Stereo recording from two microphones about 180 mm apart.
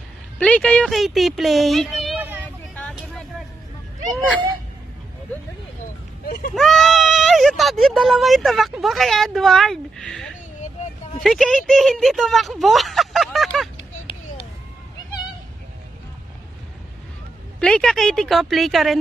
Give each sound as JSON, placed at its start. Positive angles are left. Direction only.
{"t": 0.4, "sound": "speech", "side_deg": 5}
{"t": 2.1, "sound": "vehicle", "side_deg": -10}
{"t": 2.7, "sound": "vehicle", "side_deg": 5}
{"t": 6.5, "sound": "speech", "side_deg": 0}
{"t": 17.6, "sound": "speech", "side_deg": 5}